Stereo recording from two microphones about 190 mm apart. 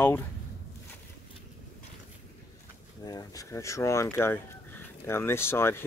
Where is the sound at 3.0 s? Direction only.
20° left (ahead or behind).